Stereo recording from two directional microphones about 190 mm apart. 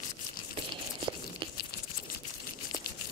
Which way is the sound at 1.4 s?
25° right (ahead or behind).